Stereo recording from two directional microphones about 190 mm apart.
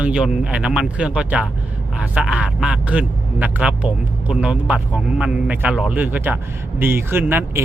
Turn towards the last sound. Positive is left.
turn(degrees=-10)  # may be behind; listen again after turning